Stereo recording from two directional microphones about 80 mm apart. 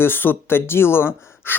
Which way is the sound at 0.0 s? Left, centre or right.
Left.